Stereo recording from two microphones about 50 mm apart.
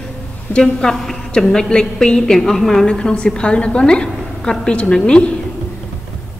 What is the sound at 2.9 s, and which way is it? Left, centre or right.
A woman's voice, centre.